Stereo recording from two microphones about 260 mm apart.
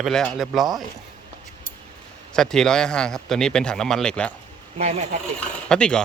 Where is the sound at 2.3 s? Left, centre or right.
Centre.